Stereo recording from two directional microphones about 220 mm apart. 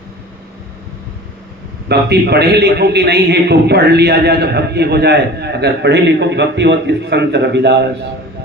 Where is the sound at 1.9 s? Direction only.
50° right (ahead or behind).